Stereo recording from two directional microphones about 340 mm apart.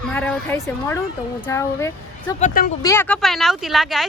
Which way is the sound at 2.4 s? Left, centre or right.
Left.